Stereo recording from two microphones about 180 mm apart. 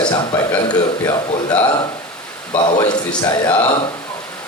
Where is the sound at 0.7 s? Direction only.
20° left (ahead or behind).